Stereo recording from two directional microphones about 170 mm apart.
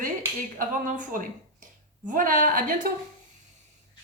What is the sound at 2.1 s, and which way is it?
Speech, 50° right (ahead or behind).